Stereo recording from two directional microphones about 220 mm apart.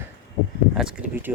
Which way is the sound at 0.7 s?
5° right (ahead or behind).